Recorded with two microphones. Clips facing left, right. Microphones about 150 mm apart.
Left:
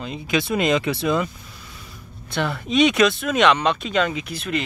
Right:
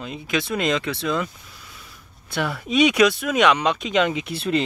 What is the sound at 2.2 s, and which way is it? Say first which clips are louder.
Speech: left 1 dB; 10° right (ahead or behind).